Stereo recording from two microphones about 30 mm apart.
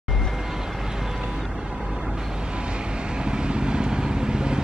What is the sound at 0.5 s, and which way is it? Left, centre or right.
Vehicle, centre.